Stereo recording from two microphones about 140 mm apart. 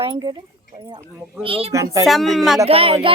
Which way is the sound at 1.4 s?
40° right (ahead or behind).